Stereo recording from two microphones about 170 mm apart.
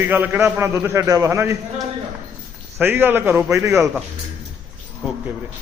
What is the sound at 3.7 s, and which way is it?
Speech, 5° right (ahead or behind).